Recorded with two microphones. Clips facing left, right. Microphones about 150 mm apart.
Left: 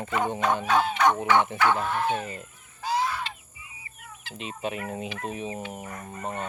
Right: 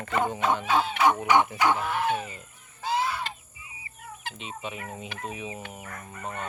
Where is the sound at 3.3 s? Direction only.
45° right (ahead or behind).